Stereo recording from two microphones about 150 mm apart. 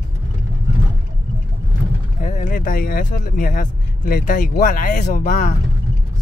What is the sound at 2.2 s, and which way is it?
Speech, 60° left (ahead or behind).